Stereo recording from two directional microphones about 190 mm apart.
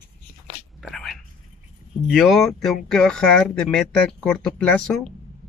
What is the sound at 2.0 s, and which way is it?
Speech, centre (ahead or behind).